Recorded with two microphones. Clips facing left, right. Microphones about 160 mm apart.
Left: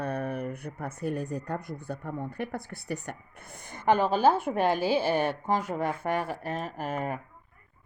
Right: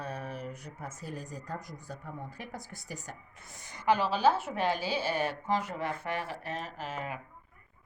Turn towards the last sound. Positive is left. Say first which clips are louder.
# left 6 dB
turn(degrees=50)  # may be behind; listen again after turning